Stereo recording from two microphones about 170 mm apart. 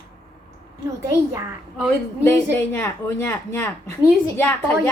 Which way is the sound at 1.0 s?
20° right (ahead or behind).